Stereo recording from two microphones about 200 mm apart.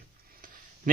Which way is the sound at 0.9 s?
45° right (ahead or behind).